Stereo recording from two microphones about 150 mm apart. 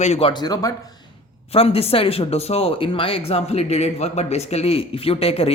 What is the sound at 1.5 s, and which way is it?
Speech, 40° left (ahead or behind).